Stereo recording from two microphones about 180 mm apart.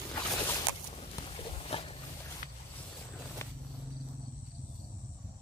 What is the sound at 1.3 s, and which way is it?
Walk, 30° left (ahead or behind).